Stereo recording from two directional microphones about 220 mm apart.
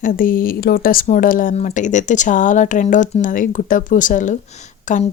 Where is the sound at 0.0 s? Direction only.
40° left (ahead or behind).